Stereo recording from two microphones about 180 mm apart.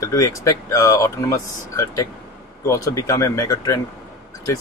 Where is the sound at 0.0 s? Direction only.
20° left (ahead or behind).